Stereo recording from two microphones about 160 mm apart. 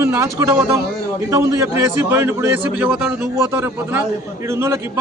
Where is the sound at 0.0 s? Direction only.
15° right (ahead or behind).